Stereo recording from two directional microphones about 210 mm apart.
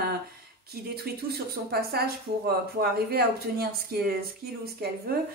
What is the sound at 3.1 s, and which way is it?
Speech, 45° right (ahead or behind).